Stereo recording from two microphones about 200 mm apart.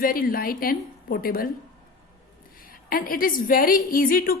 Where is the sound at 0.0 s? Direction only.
45° left (ahead or behind).